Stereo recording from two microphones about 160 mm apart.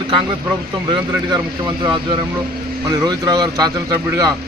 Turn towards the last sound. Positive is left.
turn(degrees=-20)  # may be behind; listen again after turning